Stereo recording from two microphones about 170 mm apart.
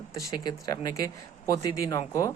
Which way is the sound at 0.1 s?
20° left (ahead or behind).